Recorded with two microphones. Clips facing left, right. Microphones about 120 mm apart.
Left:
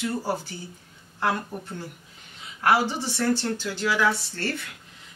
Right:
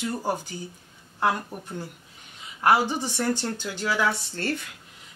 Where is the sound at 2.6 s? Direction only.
15° right (ahead or behind).